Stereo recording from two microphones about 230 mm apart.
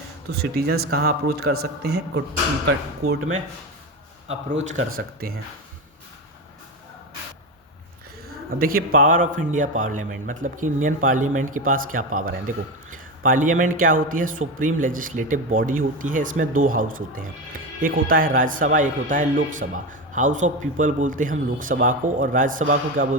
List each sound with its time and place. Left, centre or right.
0.3 s speech: right
4.3 s a man's voice: right
8.4 s a man's voice: right